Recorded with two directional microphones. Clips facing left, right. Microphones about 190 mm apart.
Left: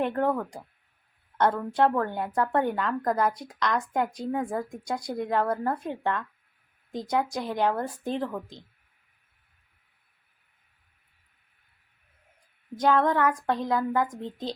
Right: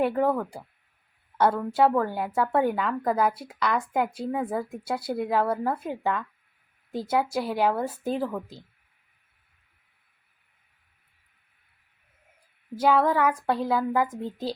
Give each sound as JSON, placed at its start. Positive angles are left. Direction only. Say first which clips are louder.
{"t": 0.0, "sound": "a woman's voice", "louder": "right 2 dB", "side_deg": -5}
{"t": 12.7, "sound": "a woman's voice", "louder": "right 1 dB", "side_deg": -10}